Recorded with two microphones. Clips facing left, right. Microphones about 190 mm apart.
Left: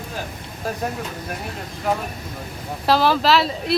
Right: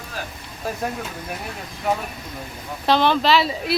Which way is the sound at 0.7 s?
Centre (ahead or behind).